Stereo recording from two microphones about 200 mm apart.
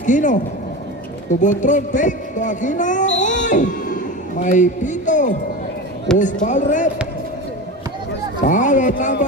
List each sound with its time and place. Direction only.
0.0 s speech: 40° left (ahead or behind)
1.4 s speech: 40° left (ahead or behind)
6.1 s speech: 5° left (ahead or behind)
6.4 s speech: 40° left (ahead or behind)
8.4 s speech: 40° left (ahead or behind)